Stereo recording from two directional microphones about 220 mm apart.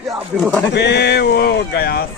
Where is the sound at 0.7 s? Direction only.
50° left (ahead or behind).